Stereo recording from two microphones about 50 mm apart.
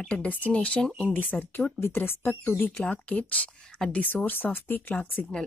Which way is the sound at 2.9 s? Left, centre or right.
Left.